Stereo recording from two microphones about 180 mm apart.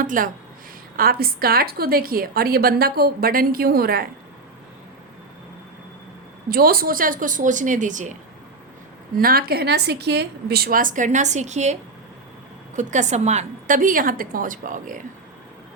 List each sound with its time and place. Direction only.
0.0 s a woman's voice: 50° right (ahead or behind)
6.5 s a woman's voice: 55° right (ahead or behind)
9.1 s a woman's voice: 55° right (ahead or behind)